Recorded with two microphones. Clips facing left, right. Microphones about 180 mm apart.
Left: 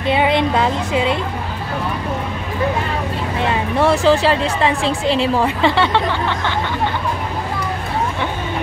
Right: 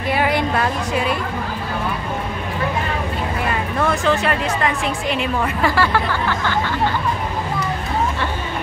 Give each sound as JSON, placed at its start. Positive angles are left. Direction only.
{"t": 0.1, "sound": "a woman's voice", "side_deg": 20}
{"t": 3.3, "sound": "a woman's voice", "side_deg": 25}